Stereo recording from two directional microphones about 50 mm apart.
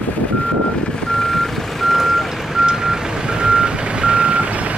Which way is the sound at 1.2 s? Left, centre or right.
Centre.